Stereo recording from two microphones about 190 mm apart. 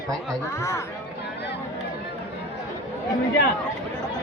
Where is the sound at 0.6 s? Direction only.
15° left (ahead or behind).